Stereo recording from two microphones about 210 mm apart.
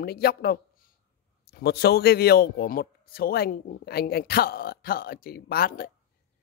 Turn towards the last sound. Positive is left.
turn(degrees=45)  # may be behind; listen again after turning